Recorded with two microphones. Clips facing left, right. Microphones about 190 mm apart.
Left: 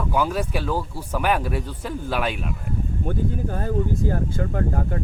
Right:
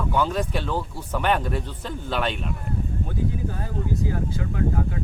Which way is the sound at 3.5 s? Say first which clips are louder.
Left 4 dB; 50° left (ahead or behind).